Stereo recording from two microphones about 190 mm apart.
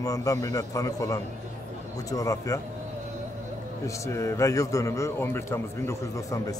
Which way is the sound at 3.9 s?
15° left (ahead or behind).